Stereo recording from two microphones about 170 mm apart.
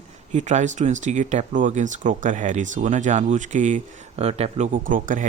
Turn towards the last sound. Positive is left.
turn(degrees=-50)  # may be behind; listen again after turning